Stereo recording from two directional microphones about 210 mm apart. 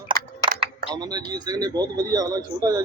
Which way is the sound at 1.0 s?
20° right (ahead or behind).